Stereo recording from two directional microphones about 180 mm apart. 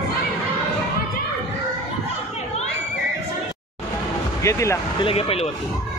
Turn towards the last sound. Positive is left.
turn(degrees=35)  # may be behind; listen again after turning